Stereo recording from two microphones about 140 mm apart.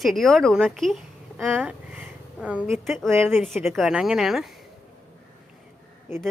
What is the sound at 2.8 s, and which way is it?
Speech, centre (ahead or behind).